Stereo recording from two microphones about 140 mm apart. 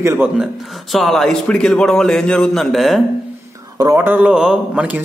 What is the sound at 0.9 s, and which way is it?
A man's voice, centre (ahead or behind).